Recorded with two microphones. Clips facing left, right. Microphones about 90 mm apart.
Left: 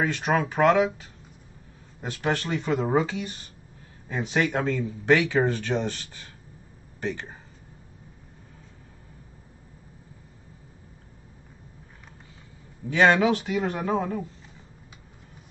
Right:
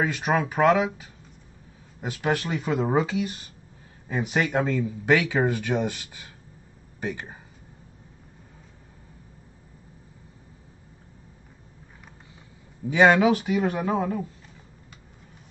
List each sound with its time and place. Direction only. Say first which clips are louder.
0.0 s speech: even; 5° right (ahead or behind)
2.0 s speech: right 1 dB; 10° right (ahead or behind)
12.9 s speech: right 2 dB; 10° right (ahead or behind)